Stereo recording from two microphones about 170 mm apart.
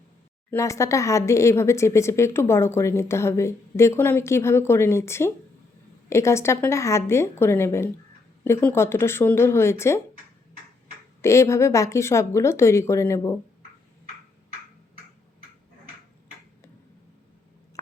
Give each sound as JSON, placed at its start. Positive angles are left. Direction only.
{"t": 0.5, "sound": "speech", "side_deg": 20}
{"t": 11.2, "sound": "speech", "side_deg": 15}